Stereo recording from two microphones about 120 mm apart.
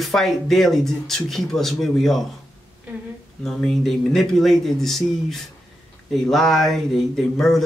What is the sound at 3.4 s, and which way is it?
Speech, 5° left (ahead or behind).